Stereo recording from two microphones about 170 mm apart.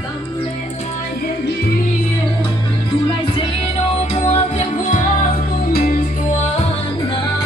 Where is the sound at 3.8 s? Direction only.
40° left (ahead or behind).